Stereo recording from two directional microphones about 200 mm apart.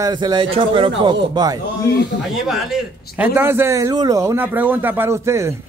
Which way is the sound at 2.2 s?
Centre (ahead or behind).